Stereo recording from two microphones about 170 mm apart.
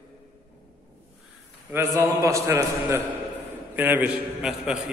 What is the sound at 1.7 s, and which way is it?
A man's voice, 15° right (ahead or behind).